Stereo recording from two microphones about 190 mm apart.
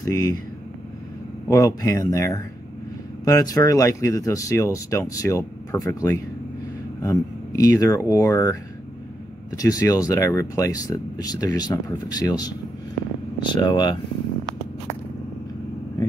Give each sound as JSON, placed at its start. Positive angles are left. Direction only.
{"t": 0.0, "sound": "speech", "side_deg": 20}
{"t": 1.5, "sound": "speech", "side_deg": 20}